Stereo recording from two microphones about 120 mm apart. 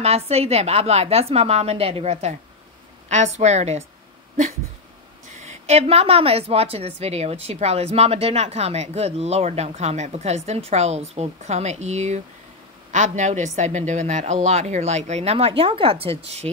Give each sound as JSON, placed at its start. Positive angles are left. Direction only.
{"t": 0.0, "sound": "a woman's voice", "side_deg": -60}
{"t": 3.1, "sound": "a woman's voice", "side_deg": -70}
{"t": 5.4, "sound": "a woman's voice", "side_deg": -65}
{"t": 12.9, "sound": "a woman's voice", "side_deg": -85}